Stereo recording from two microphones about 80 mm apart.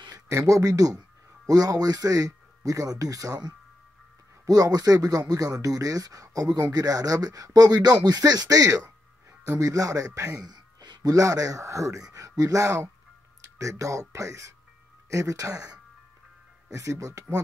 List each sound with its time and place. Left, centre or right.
0.5 s speech: right
10.4 s speech: right
16.7 s speech: right